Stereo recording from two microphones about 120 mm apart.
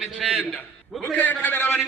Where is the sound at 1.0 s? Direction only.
15° left (ahead or behind).